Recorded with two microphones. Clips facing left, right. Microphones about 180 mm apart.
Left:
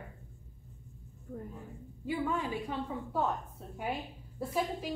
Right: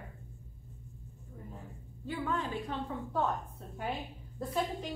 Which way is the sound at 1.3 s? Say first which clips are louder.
Left 8 dB; 60° left (ahead or behind).